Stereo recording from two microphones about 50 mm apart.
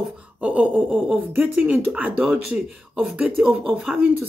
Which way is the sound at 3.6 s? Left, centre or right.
Centre.